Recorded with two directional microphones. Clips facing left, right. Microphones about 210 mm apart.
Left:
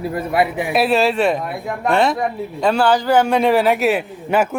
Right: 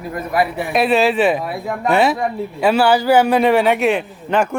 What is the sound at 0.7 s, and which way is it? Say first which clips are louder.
Speech: right 3 dB; centre (ahead or behind).